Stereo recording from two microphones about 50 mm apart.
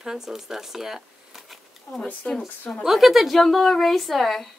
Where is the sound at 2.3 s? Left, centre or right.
Left.